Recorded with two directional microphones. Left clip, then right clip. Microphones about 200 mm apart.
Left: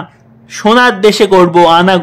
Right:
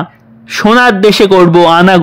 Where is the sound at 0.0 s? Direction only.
25° right (ahead or behind).